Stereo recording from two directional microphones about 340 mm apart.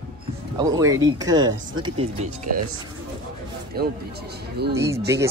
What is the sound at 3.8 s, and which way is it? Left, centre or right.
Speech, right.